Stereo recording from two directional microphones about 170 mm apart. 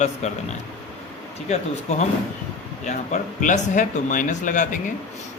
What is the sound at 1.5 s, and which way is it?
Speech, 40° left (ahead or behind).